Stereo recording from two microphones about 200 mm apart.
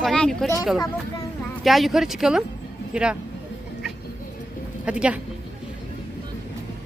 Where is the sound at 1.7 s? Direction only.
Centre (ahead or behind).